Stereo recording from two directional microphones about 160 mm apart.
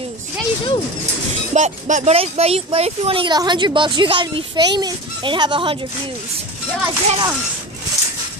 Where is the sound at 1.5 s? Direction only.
50° right (ahead or behind).